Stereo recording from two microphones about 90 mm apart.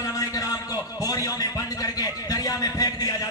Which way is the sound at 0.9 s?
40° left (ahead or behind).